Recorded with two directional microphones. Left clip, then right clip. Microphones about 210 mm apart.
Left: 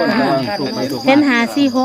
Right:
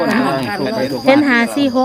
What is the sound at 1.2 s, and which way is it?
Speech, centre (ahead or behind).